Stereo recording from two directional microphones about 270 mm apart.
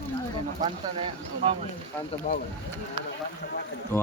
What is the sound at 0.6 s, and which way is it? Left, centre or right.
Speech, centre.